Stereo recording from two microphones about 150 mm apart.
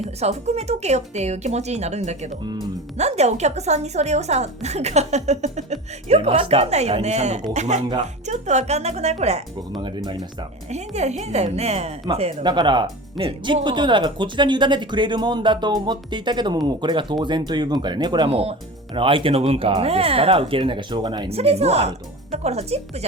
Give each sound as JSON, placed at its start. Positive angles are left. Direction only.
{"t": 0.2, "sound": "a woman's voice", "side_deg": -45}
{"t": 9.7, "sound": "speech", "side_deg": -30}
{"t": 10.7, "sound": "a woman's voice", "side_deg": -45}